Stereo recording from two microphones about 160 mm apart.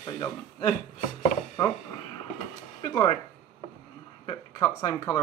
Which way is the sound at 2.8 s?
25° left (ahead or behind).